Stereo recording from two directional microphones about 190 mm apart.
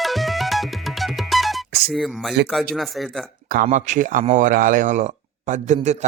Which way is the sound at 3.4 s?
50° right (ahead or behind).